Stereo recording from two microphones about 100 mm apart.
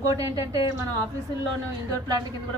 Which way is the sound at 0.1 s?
35° right (ahead or behind).